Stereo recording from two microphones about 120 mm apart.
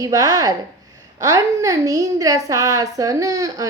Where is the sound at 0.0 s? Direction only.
30° right (ahead or behind).